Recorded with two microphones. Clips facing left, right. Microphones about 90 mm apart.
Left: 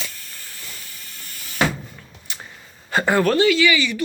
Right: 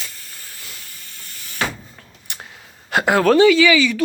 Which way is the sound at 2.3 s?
75° right (ahead or behind).